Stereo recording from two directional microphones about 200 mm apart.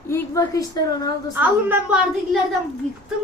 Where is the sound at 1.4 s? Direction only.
5° right (ahead or behind).